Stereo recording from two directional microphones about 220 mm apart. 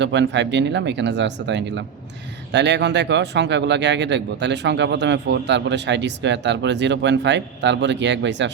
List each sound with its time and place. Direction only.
0.0 s speech: 55° right (ahead or behind)